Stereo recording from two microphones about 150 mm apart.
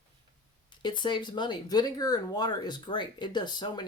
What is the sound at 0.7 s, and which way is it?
Speech, 30° left (ahead or behind).